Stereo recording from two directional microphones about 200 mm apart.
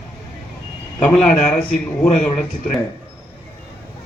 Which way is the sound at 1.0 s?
5° left (ahead or behind).